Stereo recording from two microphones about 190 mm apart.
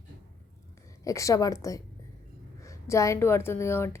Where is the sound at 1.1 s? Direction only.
15° left (ahead or behind).